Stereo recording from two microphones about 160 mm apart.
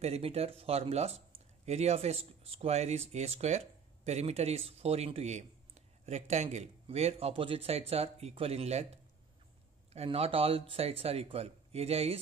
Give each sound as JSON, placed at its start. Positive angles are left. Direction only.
{"t": 0.0, "sound": "speech", "side_deg": -40}